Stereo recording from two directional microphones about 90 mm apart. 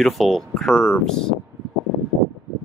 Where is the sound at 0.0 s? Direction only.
Centre (ahead or behind).